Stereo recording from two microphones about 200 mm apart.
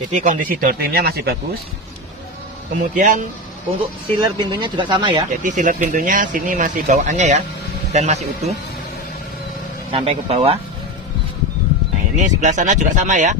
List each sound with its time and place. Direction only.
0.1 s speech: 40° right (ahead or behind)
2.7 s speech: 40° right (ahead or behind)
4.2 s speech: 20° right (ahead or behind)
5.4 s speech: 40° right (ahead or behind)
9.9 s speech: 30° right (ahead or behind)
12.1 s speech: 40° right (ahead or behind)